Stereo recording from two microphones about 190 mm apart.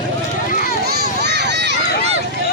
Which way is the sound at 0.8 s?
60° right (ahead or behind).